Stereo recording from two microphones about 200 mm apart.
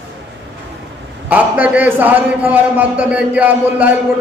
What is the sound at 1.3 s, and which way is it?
A man's voice, 10° right (ahead or behind).